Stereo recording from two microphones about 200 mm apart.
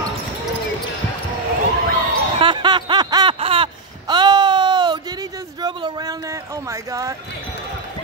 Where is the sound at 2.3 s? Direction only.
25° right (ahead or behind).